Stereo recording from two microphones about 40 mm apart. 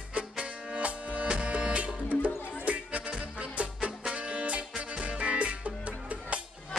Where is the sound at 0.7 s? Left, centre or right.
Right.